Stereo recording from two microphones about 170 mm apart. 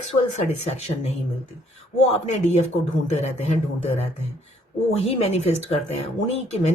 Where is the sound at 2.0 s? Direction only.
40° left (ahead or behind).